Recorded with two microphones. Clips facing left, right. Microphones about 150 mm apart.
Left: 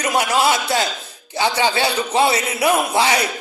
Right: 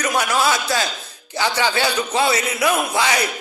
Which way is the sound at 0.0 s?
25° left (ahead or behind).